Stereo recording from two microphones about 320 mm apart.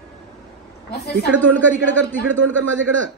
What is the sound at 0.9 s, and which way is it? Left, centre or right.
Speech, left.